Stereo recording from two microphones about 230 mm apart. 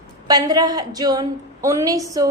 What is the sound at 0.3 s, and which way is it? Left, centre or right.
A woman's voice, centre.